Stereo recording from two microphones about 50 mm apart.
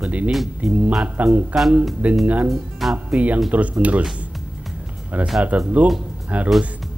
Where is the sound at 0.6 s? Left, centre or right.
Right.